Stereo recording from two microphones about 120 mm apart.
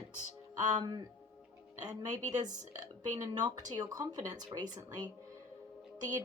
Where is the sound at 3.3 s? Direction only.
35° right (ahead or behind).